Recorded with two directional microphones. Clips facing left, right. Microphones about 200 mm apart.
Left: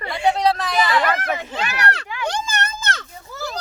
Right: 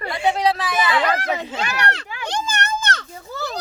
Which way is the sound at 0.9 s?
15° right (ahead or behind).